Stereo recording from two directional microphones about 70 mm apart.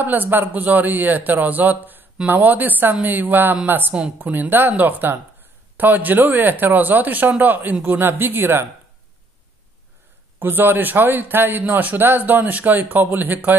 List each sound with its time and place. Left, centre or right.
0.0 s a man's voice: right
10.4 s a man's voice: right